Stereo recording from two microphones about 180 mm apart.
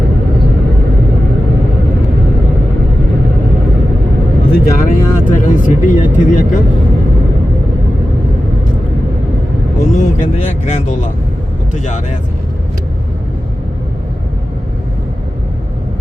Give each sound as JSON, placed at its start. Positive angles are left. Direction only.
{"t": 4.5, "sound": "speech", "side_deg": 55}
{"t": 9.8, "sound": "speech", "side_deg": 40}